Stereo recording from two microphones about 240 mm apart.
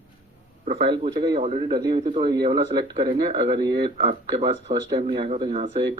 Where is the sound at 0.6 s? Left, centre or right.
Right.